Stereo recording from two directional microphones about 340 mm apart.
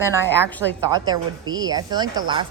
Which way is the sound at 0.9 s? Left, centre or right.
Centre.